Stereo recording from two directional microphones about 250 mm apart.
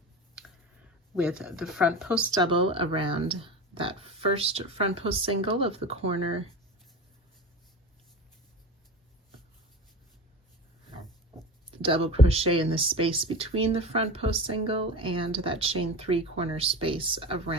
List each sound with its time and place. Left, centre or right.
0.4 s a sound: centre
1.1 s speech: centre
2.3 s speech: centre
11.8 s speech: right